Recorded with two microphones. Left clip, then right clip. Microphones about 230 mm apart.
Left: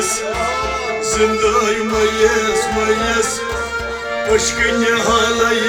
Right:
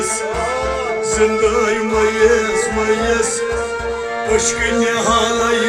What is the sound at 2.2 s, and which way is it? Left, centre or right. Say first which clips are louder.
Music: right 1 dB; left.